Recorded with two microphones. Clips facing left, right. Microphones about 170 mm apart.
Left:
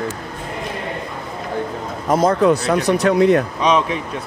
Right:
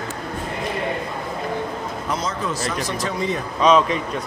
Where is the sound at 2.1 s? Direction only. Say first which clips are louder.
Left 13 dB; 60° left (ahead or behind).